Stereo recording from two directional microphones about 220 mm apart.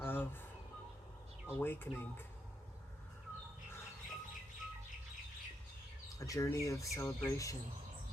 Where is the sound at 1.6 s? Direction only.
10° left (ahead or behind).